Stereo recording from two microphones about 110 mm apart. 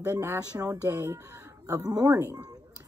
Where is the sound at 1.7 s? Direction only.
35° right (ahead or behind).